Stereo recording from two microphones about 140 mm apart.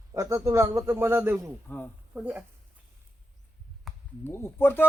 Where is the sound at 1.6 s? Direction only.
15° left (ahead or behind).